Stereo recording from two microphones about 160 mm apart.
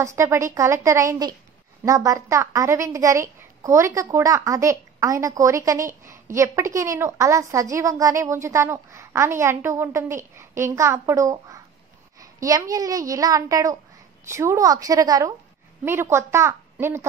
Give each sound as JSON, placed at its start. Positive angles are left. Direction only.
{"t": 0.0, "sound": "a woman's voice", "side_deg": -20}